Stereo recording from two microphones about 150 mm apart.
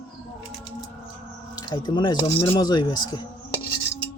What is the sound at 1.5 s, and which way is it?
Speech, 30° left (ahead or behind).